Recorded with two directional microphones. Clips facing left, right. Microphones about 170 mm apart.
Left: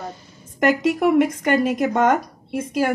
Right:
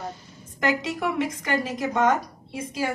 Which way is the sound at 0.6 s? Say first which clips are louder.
Left 7 dB; 55° left (ahead or behind).